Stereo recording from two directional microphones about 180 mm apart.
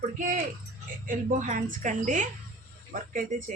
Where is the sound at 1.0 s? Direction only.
45° right (ahead or behind).